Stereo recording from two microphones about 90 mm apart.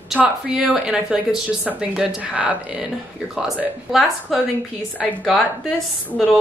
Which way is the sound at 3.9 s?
Centre (ahead or behind).